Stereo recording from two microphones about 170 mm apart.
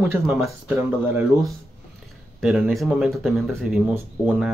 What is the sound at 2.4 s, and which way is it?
Speech, 5° right (ahead or behind).